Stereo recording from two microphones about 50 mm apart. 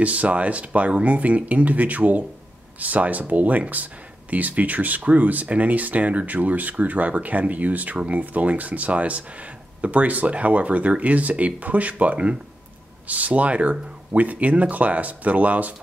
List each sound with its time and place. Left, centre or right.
0.0 s speech: right